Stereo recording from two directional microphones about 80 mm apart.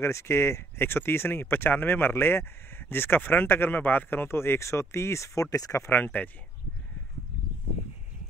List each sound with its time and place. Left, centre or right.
0.0 s speech: left
5.9 s speech: left